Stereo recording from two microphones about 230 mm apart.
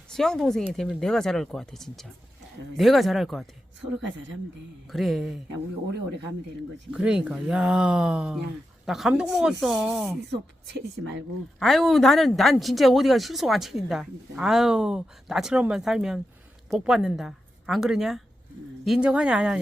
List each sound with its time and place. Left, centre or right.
0.1 s speech: centre
4.9 s speech: centre
6.9 s speech: centre
10.8 s speech: right
11.6 s speech: centre